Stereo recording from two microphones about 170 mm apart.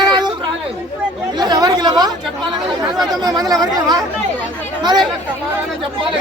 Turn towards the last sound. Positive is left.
turn(degrees=-25)  # may be behind; listen again after turning